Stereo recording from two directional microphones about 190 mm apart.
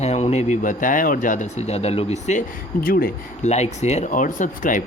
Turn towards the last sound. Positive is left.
turn(degrees=45)  # may be behind; listen again after turning